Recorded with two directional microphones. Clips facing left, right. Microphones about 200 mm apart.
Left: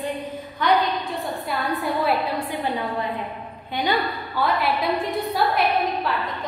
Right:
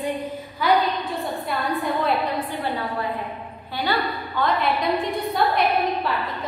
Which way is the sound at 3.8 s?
15° left (ahead or behind).